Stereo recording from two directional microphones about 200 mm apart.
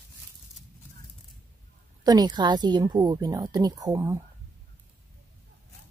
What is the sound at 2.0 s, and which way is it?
A woman's voice, 20° right (ahead or behind).